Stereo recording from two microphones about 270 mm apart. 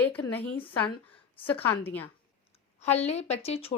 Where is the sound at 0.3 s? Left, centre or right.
Centre.